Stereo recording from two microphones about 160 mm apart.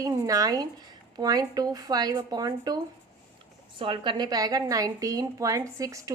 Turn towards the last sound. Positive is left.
turn(degrees=-20)  # may be behind; listen again after turning